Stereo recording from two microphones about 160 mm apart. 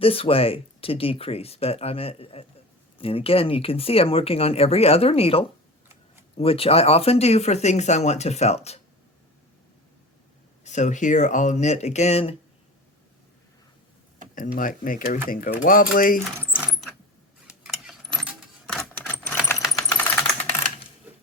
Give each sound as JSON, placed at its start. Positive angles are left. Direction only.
{"t": 0.0, "sound": "speech", "side_deg": 35}
{"t": 10.6, "sound": "speech", "side_deg": 50}
{"t": 14.3, "sound": "speech", "side_deg": 60}
{"t": 16.4, "sound": "a sound", "side_deg": -5}
{"t": 17.4, "sound": "keys jangling", "side_deg": 0}
{"t": 20.0, "sound": "a sound", "side_deg": 10}